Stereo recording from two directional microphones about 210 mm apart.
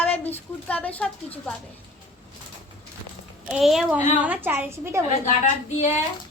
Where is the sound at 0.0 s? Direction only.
10° left (ahead or behind).